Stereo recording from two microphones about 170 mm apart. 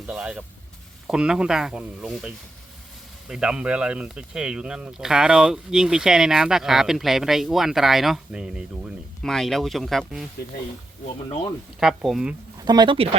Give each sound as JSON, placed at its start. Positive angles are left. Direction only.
{"t": 0.1, "sound": "speech", "side_deg": -5}
{"t": 11.8, "sound": "speech", "side_deg": -5}
{"t": 12.6, "sound": "speech", "side_deg": -25}